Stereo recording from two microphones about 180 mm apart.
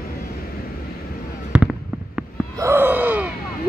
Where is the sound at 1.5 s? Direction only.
5° right (ahead or behind).